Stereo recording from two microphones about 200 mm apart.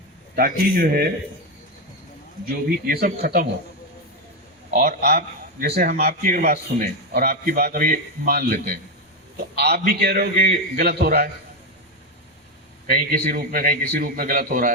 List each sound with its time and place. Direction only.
0.3 s a man's voice: 45° right (ahead or behind)
2.8 s a man's voice: 50° right (ahead or behind)
4.7 s a man's voice: 45° right (ahead or behind)
12.9 s a man's voice: 45° right (ahead or behind)